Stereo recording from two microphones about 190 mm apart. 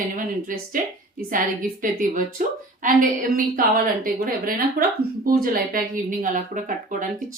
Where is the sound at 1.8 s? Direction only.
45° right (ahead or behind).